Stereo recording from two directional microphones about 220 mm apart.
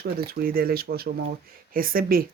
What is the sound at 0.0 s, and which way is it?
Speech, 45° right (ahead or behind).